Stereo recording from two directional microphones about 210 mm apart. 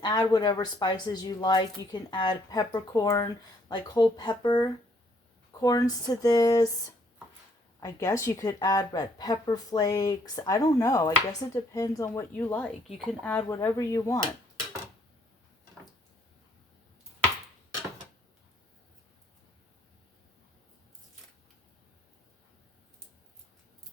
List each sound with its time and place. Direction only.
0.0 s a woman's voice: 20° left (ahead or behind)
7.8 s a woman's voice: 15° left (ahead or behind)